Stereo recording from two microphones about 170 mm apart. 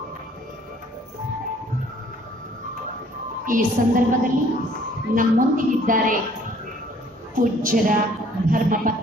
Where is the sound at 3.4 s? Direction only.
50° right (ahead or behind).